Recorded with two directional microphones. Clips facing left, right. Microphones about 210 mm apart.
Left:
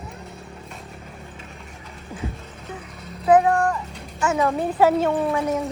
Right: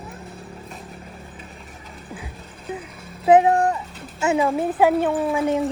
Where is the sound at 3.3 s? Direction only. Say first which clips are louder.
Right 2 dB; 20° right (ahead or behind).